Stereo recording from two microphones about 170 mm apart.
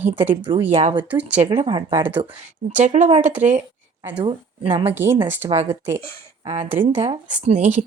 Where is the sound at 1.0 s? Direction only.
10° right (ahead or behind).